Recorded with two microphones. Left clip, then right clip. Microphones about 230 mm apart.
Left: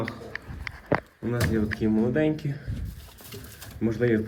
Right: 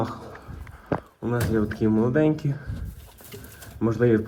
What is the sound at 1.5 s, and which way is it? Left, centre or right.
Speech, right.